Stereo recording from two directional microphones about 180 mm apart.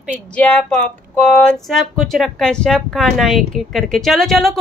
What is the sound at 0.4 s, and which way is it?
Speech, 10° left (ahead or behind).